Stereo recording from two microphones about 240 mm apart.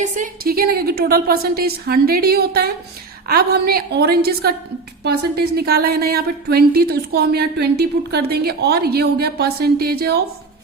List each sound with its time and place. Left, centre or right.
0.0 s a woman's voice: right